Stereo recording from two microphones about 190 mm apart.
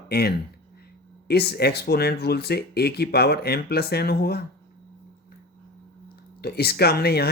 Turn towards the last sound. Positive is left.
turn(degrees=55)  # may be behind; listen again after turning